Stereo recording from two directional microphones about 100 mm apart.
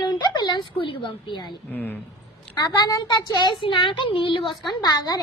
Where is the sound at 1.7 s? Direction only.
20° left (ahead or behind).